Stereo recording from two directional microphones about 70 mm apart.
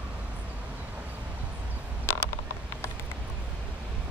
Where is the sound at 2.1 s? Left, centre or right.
Left.